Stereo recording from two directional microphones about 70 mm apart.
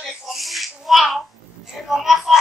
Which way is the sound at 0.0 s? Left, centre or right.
Centre.